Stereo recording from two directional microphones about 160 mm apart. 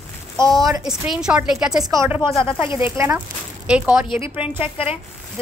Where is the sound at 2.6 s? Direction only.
30° left (ahead or behind).